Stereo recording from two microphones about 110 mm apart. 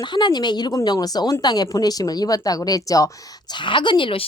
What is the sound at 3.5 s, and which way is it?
Speech, 45° left (ahead or behind).